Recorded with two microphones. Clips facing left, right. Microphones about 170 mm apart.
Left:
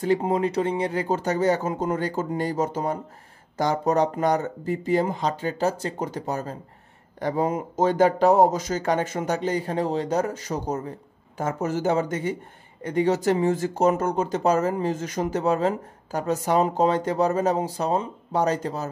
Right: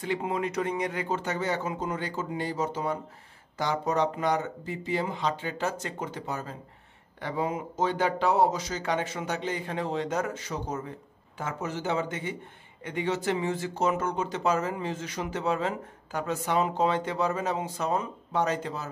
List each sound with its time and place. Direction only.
0.0 s speech: 40° left (ahead or behind)